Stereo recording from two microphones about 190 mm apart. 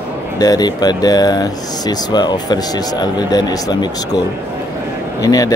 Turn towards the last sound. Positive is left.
turn(degrees=20)  # may be behind; listen again after turning